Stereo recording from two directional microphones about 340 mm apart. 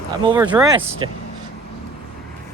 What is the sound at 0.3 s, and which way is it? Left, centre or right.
Speech, centre.